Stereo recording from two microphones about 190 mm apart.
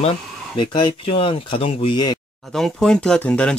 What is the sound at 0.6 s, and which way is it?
Speech, 25° left (ahead or behind).